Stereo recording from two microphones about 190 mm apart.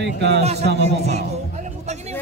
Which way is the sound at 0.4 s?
35° right (ahead or behind).